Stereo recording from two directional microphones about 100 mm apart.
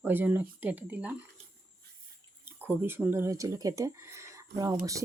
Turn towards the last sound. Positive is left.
turn(degrees=-35)  # may be behind; listen again after turning